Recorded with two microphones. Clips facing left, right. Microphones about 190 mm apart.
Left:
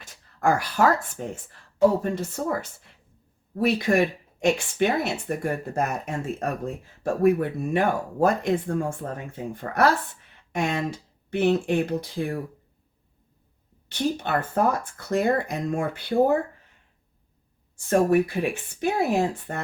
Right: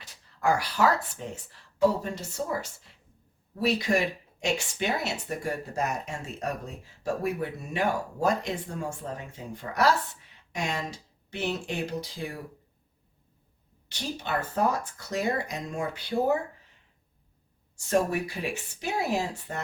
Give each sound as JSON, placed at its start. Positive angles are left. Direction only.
{"t": 0.0, "sound": "speech", "side_deg": 50}
{"t": 13.8, "sound": "speech", "side_deg": 55}
{"t": 17.7, "sound": "speech", "side_deg": 55}